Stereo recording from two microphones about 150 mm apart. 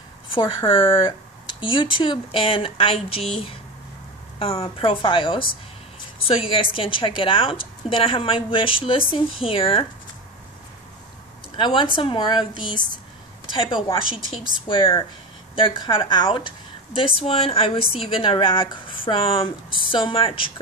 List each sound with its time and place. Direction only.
0.3 s speech: 30° left (ahead or behind)
11.5 s speech: 35° left (ahead or behind)
14.7 s speech: 35° left (ahead or behind)